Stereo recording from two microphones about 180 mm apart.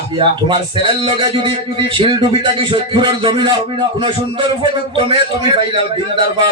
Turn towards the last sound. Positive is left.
turn(degrees=-30)  # may be behind; listen again after turning